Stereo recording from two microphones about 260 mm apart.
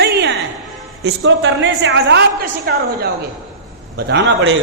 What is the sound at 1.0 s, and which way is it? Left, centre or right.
A man's voice, right.